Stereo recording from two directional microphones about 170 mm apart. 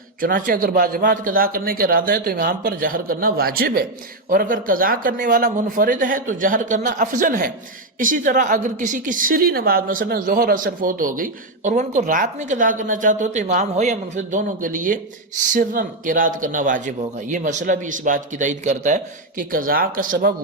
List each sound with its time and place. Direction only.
0.2 s a woman's voice: 55° right (ahead or behind)